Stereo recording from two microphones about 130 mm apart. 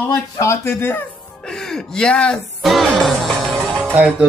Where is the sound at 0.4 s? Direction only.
20° left (ahead or behind).